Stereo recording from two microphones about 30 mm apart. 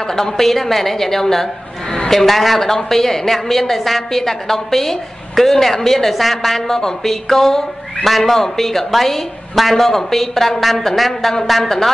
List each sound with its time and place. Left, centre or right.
0.0 s a woman's voice: centre
6.8 s a woman's voice: centre